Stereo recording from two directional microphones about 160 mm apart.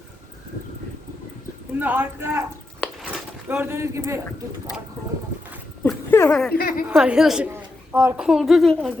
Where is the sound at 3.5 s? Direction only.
15° right (ahead or behind).